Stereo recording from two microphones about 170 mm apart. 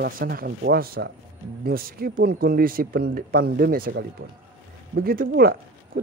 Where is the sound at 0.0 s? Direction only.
60° right (ahead or behind).